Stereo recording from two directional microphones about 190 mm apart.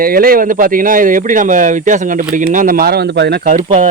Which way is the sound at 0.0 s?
50° right (ahead or behind).